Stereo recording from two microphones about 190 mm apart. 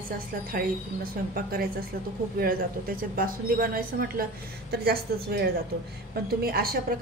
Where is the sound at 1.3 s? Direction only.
50° right (ahead or behind).